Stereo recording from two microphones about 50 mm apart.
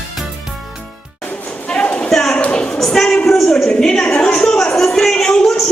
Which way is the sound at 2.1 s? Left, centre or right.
Centre.